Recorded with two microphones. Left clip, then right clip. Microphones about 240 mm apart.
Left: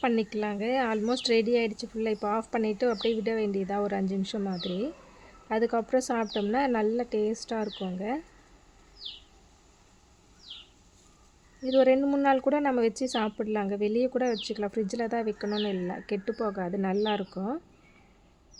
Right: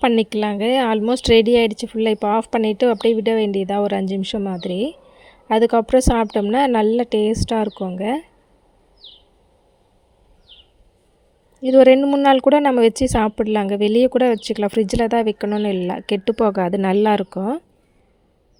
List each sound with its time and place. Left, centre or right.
0.0 s speech: right
11.6 s speech: right